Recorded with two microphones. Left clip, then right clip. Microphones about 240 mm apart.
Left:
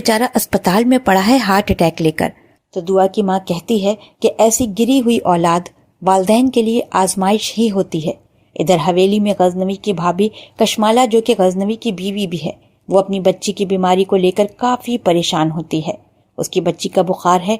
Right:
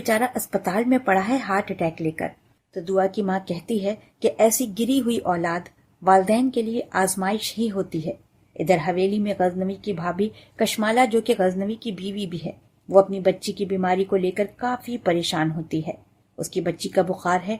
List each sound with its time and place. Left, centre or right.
0.0 s speech: left
2.7 s a woman's voice: centre